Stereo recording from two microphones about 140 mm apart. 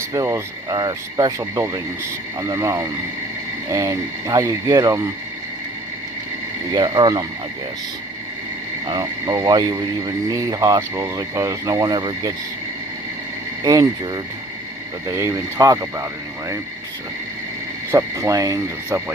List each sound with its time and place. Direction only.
0.1 s speech: 25° right (ahead or behind)
6.7 s speech: 35° right (ahead or behind)
8.9 s speech: 30° right (ahead or behind)
13.7 s speech: 25° right (ahead or behind)
17.9 s speech: 25° right (ahead or behind)